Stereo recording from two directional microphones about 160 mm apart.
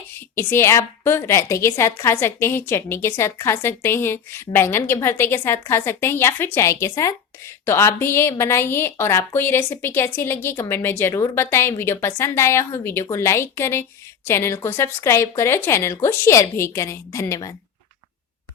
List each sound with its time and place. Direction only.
0.1 s a woman's voice: 15° left (ahead or behind)